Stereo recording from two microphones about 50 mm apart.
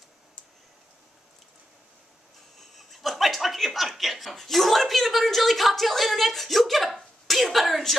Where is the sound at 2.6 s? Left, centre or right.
Centre.